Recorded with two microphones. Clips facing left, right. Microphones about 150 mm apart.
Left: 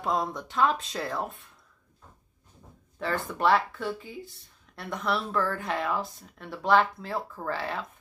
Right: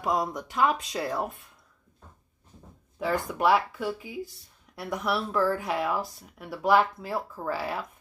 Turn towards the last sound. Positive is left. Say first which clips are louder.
# right 1 dB
turn(degrees=-5)  # may be behind; listen again after turning